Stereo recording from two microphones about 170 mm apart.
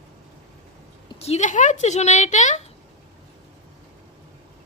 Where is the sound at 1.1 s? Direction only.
40° left (ahead or behind).